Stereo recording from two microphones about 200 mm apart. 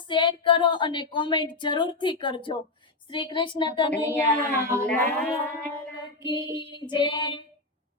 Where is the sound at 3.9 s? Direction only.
5° left (ahead or behind).